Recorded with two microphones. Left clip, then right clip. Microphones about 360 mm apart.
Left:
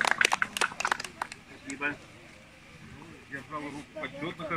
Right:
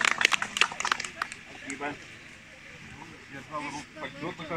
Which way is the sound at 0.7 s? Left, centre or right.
Left.